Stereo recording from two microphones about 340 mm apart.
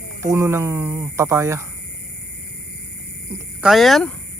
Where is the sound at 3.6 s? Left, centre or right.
Centre.